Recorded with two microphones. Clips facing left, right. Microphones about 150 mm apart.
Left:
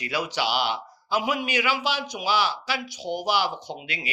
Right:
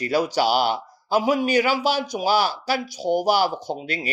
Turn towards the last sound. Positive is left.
turn(degrees=-40)  # may be behind; listen again after turning